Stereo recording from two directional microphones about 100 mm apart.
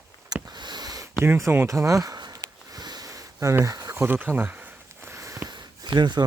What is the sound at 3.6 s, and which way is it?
Speech, 35° right (ahead or behind).